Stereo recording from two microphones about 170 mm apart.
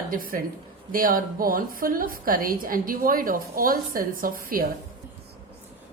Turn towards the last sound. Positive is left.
turn(degrees=-55)  # may be behind; listen again after turning